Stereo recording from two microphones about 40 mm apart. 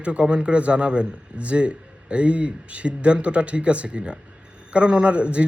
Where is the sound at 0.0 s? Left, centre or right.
Right.